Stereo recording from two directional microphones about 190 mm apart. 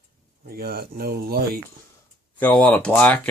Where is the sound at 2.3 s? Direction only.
10° left (ahead or behind).